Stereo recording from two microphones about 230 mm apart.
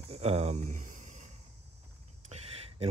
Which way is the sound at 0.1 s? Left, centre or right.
Right.